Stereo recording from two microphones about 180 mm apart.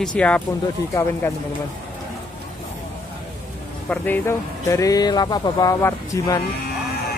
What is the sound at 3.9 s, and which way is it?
Speech, 10° left (ahead or behind).